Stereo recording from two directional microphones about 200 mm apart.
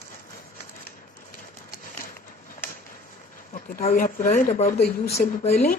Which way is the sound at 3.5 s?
40° left (ahead or behind).